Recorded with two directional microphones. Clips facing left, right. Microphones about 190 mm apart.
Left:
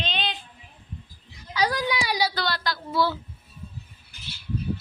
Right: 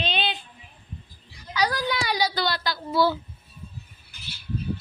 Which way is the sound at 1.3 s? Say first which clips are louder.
Even; 25° left (ahead or behind).